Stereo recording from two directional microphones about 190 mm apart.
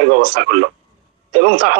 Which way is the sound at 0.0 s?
55° right (ahead or behind).